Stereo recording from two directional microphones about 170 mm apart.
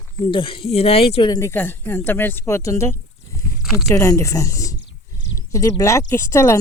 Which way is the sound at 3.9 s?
15° left (ahead or behind).